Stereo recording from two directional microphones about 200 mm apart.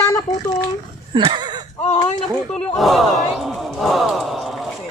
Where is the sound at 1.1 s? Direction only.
25° right (ahead or behind).